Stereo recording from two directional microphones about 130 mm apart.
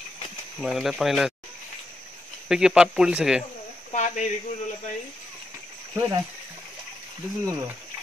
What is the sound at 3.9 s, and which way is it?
Speech, 65° left (ahead or behind).